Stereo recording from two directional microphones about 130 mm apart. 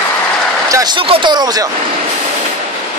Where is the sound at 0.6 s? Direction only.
30° right (ahead or behind).